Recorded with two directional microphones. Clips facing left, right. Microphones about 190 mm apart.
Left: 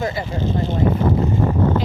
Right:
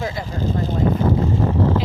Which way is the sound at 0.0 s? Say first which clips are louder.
Left 3 dB; 5° left (ahead or behind).